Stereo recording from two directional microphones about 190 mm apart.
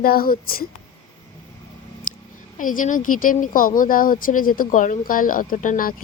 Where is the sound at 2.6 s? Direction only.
45° left (ahead or behind).